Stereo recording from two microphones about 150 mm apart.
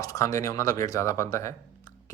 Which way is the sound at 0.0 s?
20° left (ahead or behind).